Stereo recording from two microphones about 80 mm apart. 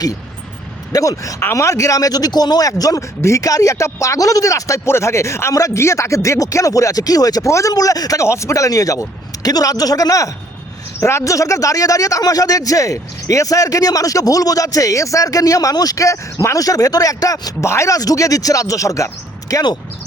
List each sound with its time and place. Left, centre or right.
0.9 s speech: left
3.2 s speech: left